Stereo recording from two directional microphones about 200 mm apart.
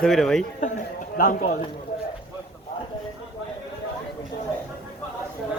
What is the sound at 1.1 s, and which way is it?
Speech, 45° left (ahead or behind).